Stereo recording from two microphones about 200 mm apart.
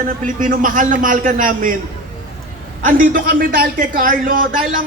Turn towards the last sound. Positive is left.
turn(degrees=-45)  # may be behind; listen again after turning